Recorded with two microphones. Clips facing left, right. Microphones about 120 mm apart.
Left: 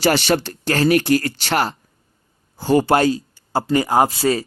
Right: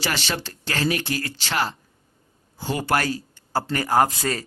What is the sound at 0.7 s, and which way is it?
Speech, 45° left (ahead or behind).